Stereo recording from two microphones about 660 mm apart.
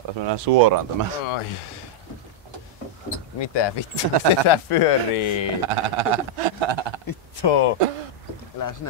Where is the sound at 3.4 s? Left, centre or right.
Left.